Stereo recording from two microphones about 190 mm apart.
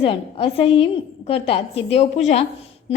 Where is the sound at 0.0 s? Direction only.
30° left (ahead or behind).